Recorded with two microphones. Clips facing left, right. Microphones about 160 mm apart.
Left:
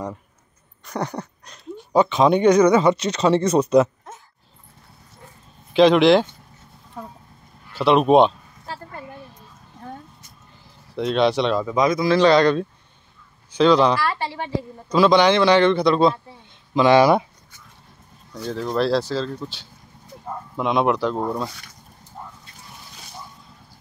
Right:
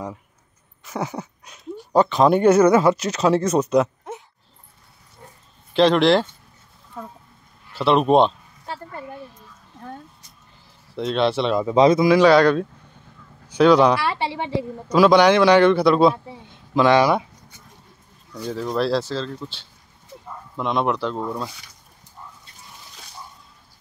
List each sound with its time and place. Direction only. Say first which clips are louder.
0.8 s speech: left 1 dB; 5° right (ahead or behind)
5.7 s speech: left 2 dB; centre (ahead or behind)
7.7 s speech: left 1 dB; centre (ahead or behind)
11.0 s speech: left 2 dB; centre (ahead or behind)
11.6 s speech: right 5 dB; 30° right (ahead or behind)
12.1 s speech: right 1 dB; 10° right (ahead or behind)
14.0 s speech: right 1 dB; 20° right (ahead or behind)
14.9 s a man's voice: right 1 dB; 10° right (ahead or behind)
18.4 s speech: left 1 dB; 5° right (ahead or behind)
22.2 s a sound: left 5 dB; 45° left (ahead or behind)